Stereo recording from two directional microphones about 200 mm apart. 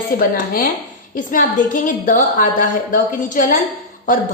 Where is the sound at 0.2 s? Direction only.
45° left (ahead or behind).